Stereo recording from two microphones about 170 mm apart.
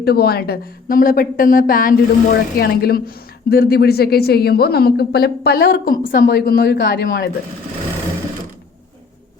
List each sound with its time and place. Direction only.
0.0 s a woman's voice: 70° left (ahead or behind)
6.1 s a woman's voice: 90° left; by 7.3 s 70° left (ahead or behind)